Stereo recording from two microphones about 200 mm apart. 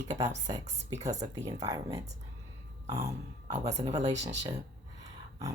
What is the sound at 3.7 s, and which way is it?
Speech, 35° right (ahead or behind).